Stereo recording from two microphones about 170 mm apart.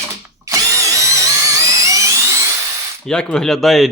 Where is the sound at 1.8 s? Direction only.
20° right (ahead or behind).